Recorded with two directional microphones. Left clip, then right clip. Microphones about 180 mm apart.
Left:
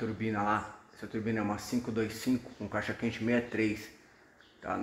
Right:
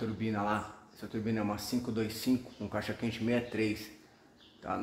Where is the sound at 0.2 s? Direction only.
25° left (ahead or behind).